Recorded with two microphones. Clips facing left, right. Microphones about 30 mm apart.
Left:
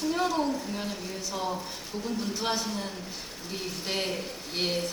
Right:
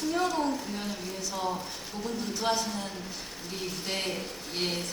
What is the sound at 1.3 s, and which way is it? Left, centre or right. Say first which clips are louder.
A woman's voice: even; centre.